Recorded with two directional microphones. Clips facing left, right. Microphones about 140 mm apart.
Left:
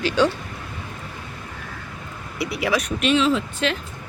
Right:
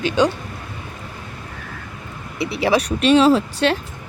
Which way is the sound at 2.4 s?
30° right (ahead or behind).